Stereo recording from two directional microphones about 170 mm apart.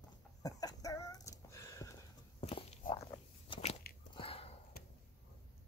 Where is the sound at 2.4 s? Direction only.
35° left (ahead or behind).